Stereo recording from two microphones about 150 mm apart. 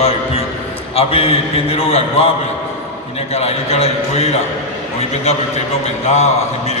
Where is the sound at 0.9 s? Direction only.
40° left (ahead or behind).